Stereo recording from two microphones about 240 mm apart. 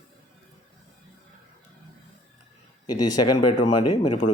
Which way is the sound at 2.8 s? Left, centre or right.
Centre.